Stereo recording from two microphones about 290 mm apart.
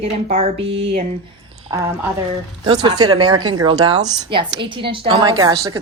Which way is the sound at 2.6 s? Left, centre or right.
Centre.